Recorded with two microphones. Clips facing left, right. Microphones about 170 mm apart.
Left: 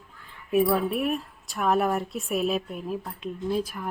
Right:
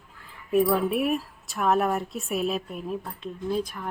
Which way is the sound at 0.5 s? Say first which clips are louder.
Right 1 dB; centre (ahead or behind).